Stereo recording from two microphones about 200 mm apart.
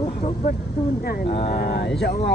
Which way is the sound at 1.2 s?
30° left (ahead or behind).